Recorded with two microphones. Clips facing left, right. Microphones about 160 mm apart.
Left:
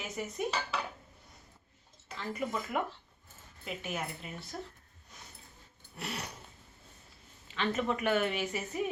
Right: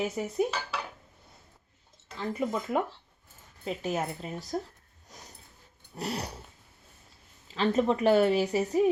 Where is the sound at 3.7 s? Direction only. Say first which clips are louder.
Right 7 dB; 40° right (ahead or behind).